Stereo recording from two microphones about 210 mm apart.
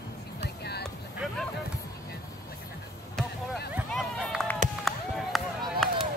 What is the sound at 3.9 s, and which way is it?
Run, centre (ahead or behind).